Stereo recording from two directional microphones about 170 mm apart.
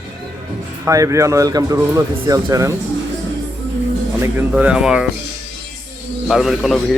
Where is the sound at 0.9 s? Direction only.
20° right (ahead or behind).